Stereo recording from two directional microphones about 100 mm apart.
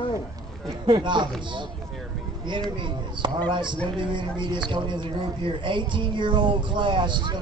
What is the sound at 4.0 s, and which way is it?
Speech, 50° right (ahead or behind).